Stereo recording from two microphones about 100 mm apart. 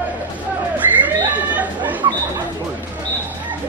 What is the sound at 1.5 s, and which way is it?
Chatter, 15° right (ahead or behind).